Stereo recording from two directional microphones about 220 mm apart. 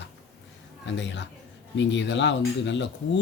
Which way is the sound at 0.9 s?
55° left (ahead or behind).